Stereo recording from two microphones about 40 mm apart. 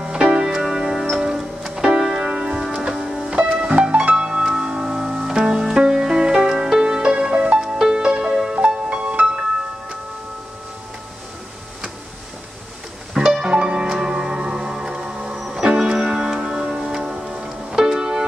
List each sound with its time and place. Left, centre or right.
0.0 s music: right
2.2 s music: right
2.6 s music: centre
3.7 s music: right
13.4 s music: right
15.4 s music: centre